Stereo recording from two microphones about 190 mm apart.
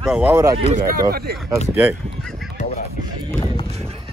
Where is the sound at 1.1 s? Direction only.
55° right (ahead or behind).